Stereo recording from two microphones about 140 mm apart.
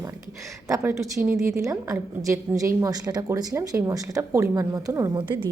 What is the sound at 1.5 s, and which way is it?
A woman's voice, 20° right (ahead or behind).